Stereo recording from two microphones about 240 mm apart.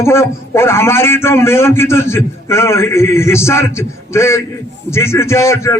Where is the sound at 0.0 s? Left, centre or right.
Centre.